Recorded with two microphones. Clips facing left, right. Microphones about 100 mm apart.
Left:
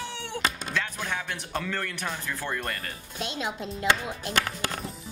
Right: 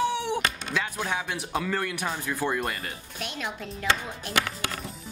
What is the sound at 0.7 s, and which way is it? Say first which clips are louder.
Speech: right 2 dB; 10° right (ahead or behind).